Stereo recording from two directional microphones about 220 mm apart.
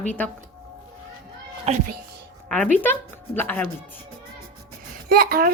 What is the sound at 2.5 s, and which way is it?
Speech, 5° left (ahead or behind).